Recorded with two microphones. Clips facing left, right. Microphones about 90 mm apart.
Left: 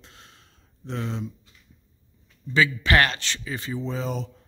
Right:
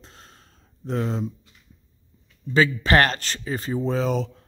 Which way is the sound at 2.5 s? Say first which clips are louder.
Right 2 dB; 40° right (ahead or behind).